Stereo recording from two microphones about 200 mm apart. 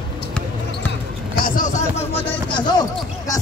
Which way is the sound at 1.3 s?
45° left (ahead or behind).